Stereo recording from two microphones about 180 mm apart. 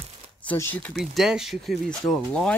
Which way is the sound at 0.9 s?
Centre (ahead or behind).